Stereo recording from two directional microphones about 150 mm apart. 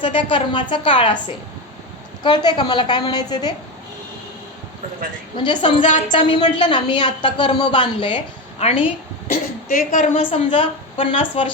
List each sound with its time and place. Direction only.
0.0 s a woman's voice: 35° left (ahead or behind)
2.2 s a woman's voice: 30° left (ahead or behind)
5.4 s a woman's voice: 35° left (ahead or behind)
9.2 s a woman's voice: 65° left (ahead or behind)
10.2 s a woman's voice: 40° left (ahead or behind)